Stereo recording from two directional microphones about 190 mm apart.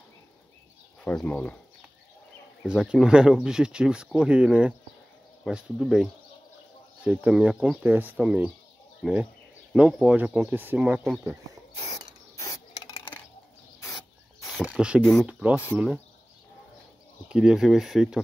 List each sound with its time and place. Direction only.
1.0 s speech: 5° left (ahead or behind)
2.6 s speech: 5° right (ahead or behind)
11.8 s filing: 20° left (ahead or behind)
14.5 s speech: 5° right (ahead or behind)
17.3 s speech: 5° right (ahead or behind)